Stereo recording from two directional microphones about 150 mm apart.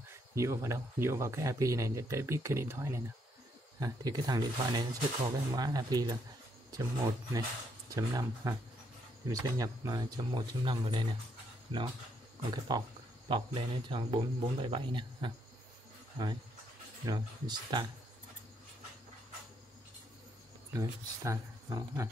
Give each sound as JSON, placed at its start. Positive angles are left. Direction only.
{"t": 0.3, "sound": "speech", "side_deg": -20}
{"t": 7.9, "sound": "speech", "side_deg": -20}
{"t": 17.0, "sound": "speech", "side_deg": -25}
{"t": 20.7, "sound": "speech", "side_deg": -20}